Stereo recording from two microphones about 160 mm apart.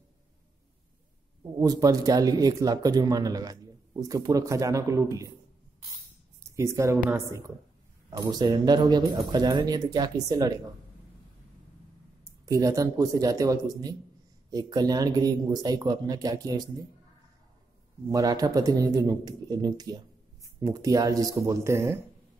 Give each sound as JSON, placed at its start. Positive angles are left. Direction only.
{"t": 1.6, "sound": "speech", "side_deg": -25}
{"t": 6.4, "sound": "speech", "side_deg": -20}
{"t": 12.4, "sound": "speech", "side_deg": -20}
{"t": 18.1, "sound": "speech", "side_deg": -25}